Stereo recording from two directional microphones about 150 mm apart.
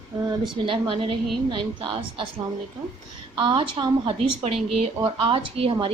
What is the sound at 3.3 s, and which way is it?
Speech, 35° right (ahead or behind).